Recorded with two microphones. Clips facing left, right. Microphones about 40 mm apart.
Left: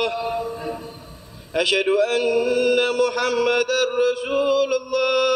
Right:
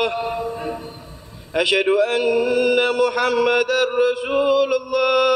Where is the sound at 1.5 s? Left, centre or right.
Centre.